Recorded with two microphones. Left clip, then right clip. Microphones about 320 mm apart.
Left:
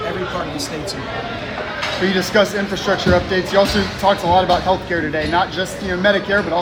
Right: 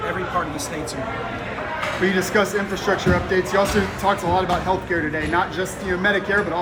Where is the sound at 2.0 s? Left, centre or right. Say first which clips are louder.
Left 4 dB; left.